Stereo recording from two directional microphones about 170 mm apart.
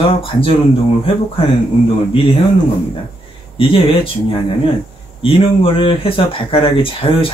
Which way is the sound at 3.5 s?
30° left (ahead or behind).